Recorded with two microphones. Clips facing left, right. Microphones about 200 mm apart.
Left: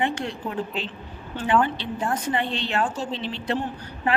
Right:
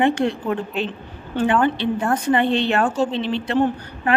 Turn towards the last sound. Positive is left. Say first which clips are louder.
# right 7 dB
turn(degrees=-65)  # may be behind; listen again after turning